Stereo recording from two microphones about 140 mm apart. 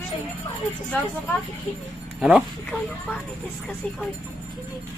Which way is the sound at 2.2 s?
5° right (ahead or behind).